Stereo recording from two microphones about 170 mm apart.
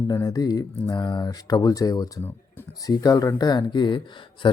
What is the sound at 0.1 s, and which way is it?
A man's voice, 20° left (ahead or behind).